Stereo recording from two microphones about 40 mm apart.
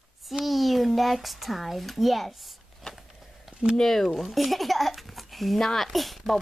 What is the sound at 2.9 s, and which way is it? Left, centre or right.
Walk, centre.